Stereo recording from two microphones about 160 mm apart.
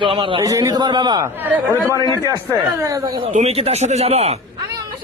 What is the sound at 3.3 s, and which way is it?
A man's voice, 40° right (ahead or behind).